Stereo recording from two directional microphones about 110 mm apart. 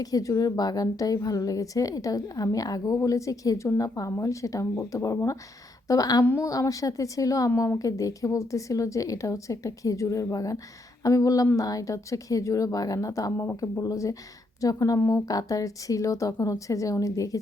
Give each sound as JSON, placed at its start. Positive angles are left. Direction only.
{"t": 0.0, "sound": "a woman's voice", "side_deg": 35}
{"t": 6.2, "sound": "a woman's voice", "side_deg": 20}
{"t": 6.5, "sound": "a woman's voice", "side_deg": 30}